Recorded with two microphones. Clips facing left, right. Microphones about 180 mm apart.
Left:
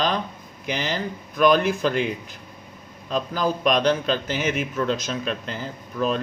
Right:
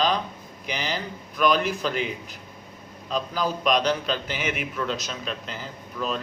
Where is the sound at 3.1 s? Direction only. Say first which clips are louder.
Left 3 dB; 50° left (ahead or behind).